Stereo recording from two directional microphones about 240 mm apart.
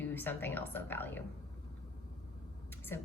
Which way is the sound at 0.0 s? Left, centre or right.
Centre.